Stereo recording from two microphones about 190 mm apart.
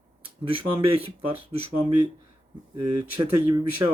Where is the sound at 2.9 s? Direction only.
25° right (ahead or behind).